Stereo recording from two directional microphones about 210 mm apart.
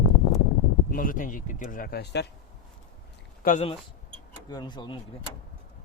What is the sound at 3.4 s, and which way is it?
Speech, 30° left (ahead or behind).